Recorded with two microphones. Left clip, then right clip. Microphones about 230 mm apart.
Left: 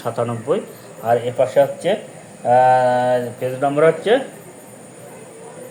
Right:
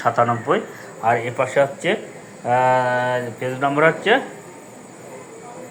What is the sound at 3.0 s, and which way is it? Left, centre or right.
Speech, centre.